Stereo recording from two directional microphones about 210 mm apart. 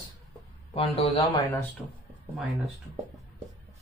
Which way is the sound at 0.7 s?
25° left (ahead or behind).